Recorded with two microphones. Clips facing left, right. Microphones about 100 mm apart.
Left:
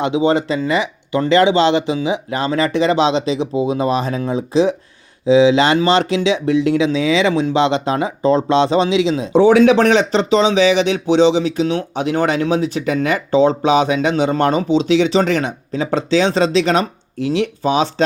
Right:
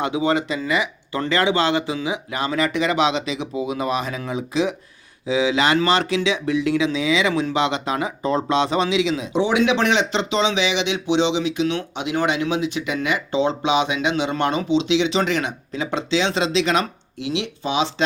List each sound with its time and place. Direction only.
0.0 s speech: 25° left (ahead or behind); by 17.8 s 45° left (ahead or behind)